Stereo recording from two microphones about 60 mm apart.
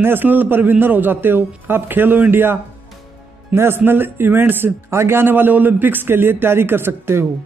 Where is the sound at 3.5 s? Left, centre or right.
Right.